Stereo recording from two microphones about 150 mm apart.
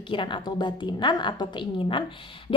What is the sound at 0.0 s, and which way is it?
A woman's voice, 35° left (ahead or behind).